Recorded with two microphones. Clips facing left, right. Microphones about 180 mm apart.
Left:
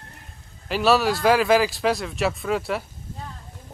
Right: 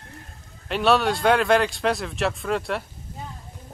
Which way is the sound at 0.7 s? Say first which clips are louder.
Left 1 dB; centre (ahead or behind).